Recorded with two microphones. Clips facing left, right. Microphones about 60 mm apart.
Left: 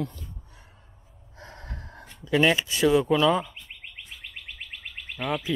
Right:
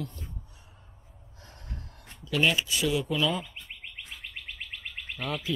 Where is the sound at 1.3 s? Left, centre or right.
Left.